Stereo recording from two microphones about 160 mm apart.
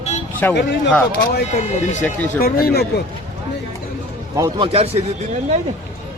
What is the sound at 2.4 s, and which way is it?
Speech, 70° left (ahead or behind).